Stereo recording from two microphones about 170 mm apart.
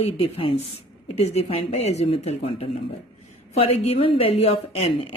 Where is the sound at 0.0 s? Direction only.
35° left (ahead or behind).